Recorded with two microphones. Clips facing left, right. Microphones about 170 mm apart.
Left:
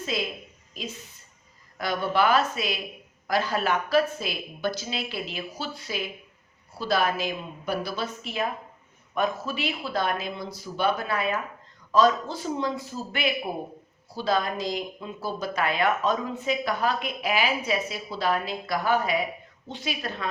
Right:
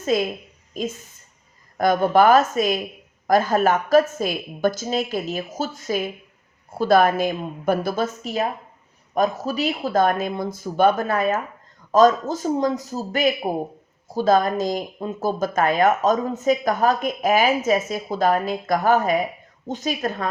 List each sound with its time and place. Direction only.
0.0 s a woman's voice: 45° right (ahead or behind)